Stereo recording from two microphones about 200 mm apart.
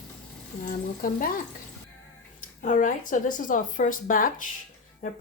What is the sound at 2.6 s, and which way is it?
Speech, 40° left (ahead or behind).